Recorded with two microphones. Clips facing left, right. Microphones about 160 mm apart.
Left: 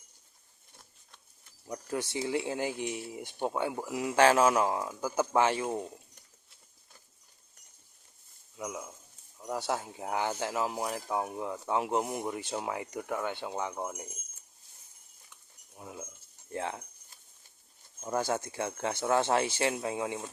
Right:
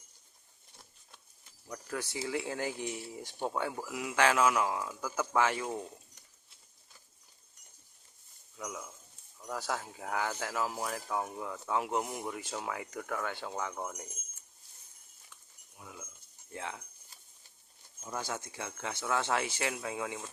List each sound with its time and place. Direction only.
1.6 s speech: 25° left (ahead or behind)
8.5 s speech: 20° left (ahead or behind)
15.8 s a sound: 35° left (ahead or behind)
16.5 s speech: 40° left (ahead or behind)
18.0 s speech: 45° left (ahead or behind); by 20.2 s 30° left (ahead or behind)